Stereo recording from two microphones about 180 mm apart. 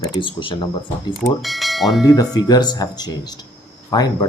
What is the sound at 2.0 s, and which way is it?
Speech, 20° left (ahead or behind).